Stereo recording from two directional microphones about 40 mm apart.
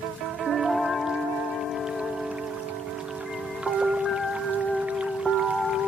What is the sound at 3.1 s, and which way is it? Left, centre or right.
Music, right.